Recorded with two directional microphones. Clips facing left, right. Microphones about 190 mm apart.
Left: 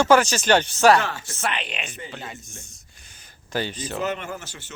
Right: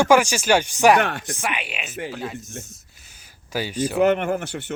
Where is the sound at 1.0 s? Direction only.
60° right (ahead or behind).